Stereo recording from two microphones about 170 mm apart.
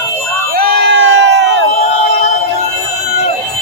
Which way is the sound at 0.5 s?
75° right (ahead or behind).